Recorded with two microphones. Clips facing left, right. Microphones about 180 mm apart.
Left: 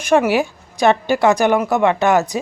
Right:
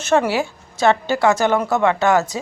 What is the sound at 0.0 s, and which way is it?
A woman's voice, 15° left (ahead or behind).